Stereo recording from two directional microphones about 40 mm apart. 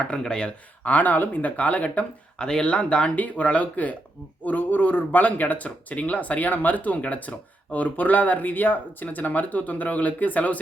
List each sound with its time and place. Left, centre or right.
0.3 s speech: left
0.9 s speech: left
2.4 s speech: centre
3.2 s speech: left
4.4 s speech: left